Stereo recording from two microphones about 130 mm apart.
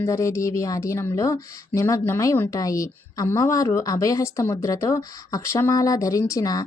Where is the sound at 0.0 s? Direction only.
25° left (ahead or behind).